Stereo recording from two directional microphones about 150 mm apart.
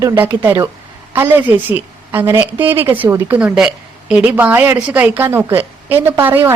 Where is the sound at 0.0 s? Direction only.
15° right (ahead or behind).